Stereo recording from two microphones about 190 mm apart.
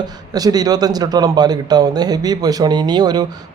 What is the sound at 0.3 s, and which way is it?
Speech, 20° right (ahead or behind).